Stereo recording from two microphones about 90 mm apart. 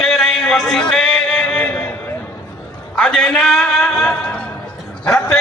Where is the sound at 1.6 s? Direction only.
20° left (ahead or behind).